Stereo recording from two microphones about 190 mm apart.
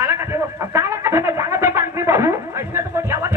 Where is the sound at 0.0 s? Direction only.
10° right (ahead or behind).